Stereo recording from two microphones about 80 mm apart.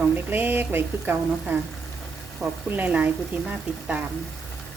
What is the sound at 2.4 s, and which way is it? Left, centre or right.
Speech, right.